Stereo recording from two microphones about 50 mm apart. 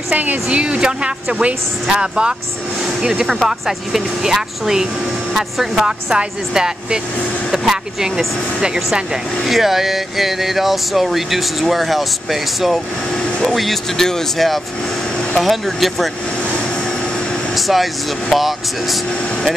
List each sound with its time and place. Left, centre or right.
0.1 s a woman's voice: right
0.6 s speech: right
1.9 s speech: centre
17.6 s vehicle: centre
18.3 s speech: centre